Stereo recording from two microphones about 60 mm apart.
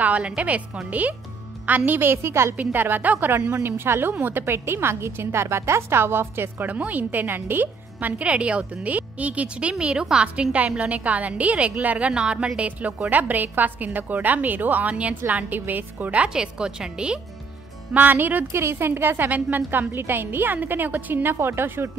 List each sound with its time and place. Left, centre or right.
0.0 s a woman's voice: right
2.2 s a woman's voice: right
2.5 s a woman's voice: right
6.7 s a woman's voice: right
17.9 s a woman's voice: right
18.5 s a woman's voice: right